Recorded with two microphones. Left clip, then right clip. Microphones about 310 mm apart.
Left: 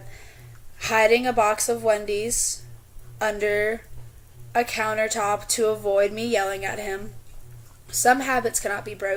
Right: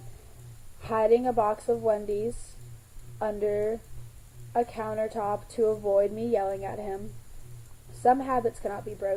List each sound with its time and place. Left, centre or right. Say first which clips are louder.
0.8 s a woman's voice: left 5 dB; left
8.0 s a woman's voice: left 4 dB; left